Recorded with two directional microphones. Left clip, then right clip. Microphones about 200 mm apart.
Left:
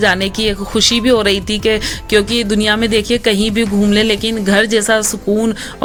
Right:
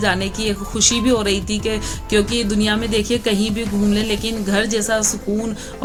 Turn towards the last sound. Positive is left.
turn(degrees=45)  # may be behind; listen again after turning